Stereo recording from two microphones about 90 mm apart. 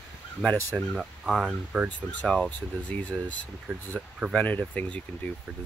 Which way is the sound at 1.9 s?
15° left (ahead or behind).